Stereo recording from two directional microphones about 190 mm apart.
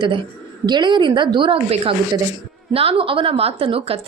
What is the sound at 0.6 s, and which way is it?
A woman's voice, 25° right (ahead or behind).